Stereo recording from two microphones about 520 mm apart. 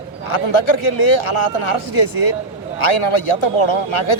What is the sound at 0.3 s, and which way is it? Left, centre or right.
A man's voice, left.